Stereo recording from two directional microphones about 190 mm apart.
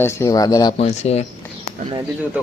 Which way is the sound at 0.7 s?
35° left (ahead or behind).